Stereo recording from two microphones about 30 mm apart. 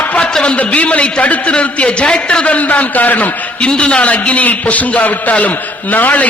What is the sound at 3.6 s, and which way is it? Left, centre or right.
Speech, left.